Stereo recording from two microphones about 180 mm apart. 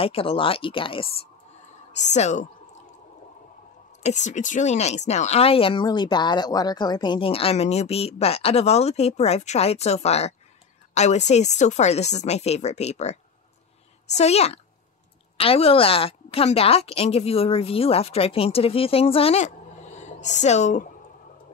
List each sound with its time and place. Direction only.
0.0 s speech: 30° left (ahead or behind)
2.0 s speech: 40° left (ahead or behind)
4.0 s speech: 40° left (ahead or behind)